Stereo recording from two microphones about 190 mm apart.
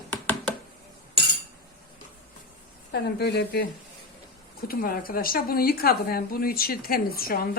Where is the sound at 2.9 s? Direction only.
60° left (ahead or behind).